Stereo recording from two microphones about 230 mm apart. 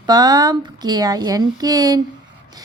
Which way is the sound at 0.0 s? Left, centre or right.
Centre.